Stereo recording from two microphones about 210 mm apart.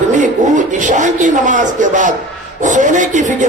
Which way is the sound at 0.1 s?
35° right (ahead or behind).